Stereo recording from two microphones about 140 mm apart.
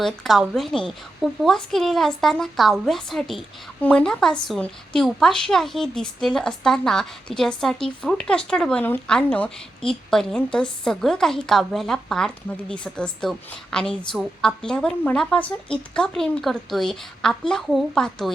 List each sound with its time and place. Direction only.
0.0 s a woman's voice: centre (ahead or behind)